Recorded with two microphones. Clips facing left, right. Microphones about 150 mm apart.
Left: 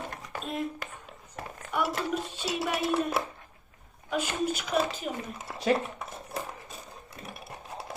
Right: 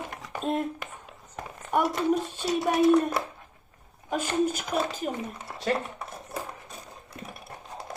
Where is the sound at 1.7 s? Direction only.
45° right (ahead or behind).